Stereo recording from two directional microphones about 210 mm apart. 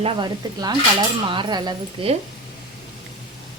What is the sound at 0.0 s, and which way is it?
A woman's voice, 20° right (ahead or behind).